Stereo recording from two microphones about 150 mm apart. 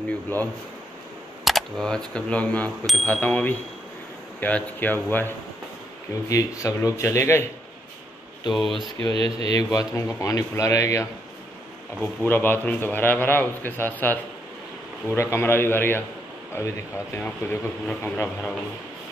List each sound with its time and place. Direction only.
1.4 s a man's voice: centre (ahead or behind); by 7.4 s 20° left (ahead or behind)
8.5 s speech: centre (ahead or behind)
9.0 s speech: 40° right (ahead or behind)
9.8 s a man's voice: 20° left (ahead or behind)